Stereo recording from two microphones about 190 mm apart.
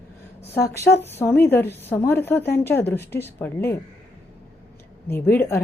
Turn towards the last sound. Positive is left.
turn(degrees=10)  # may be behind; listen again after turning